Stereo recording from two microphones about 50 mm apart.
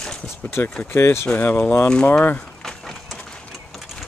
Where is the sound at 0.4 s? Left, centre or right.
Left.